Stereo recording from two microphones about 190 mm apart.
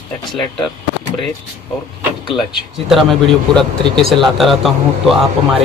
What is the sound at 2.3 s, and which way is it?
Speech, centre (ahead or behind).